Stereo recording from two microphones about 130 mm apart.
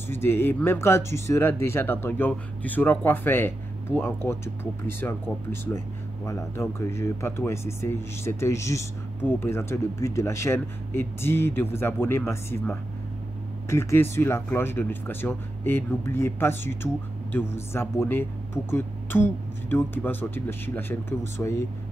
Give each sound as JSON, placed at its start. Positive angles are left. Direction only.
{"t": 0.1, "sound": "speech", "side_deg": 20}